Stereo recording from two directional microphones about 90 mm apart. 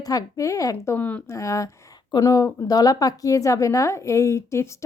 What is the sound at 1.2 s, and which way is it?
A woman's voice, 35° left (ahead or behind).